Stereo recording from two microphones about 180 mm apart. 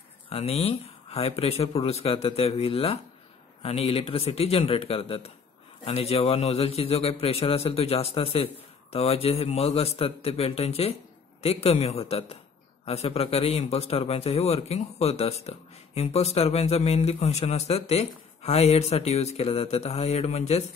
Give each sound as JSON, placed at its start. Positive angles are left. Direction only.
{"t": 0.3, "sound": "a man's voice", "side_deg": 35}